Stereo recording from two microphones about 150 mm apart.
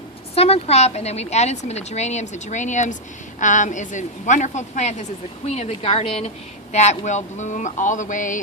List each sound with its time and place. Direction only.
0.3 s a woman's voice: 40° left (ahead or behind); by 8.4 s 60° left (ahead or behind)